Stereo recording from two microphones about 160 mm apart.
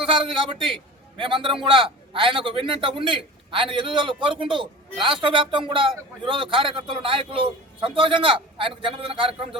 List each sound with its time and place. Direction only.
0.1 s a man's voice: 30° right (ahead or behind)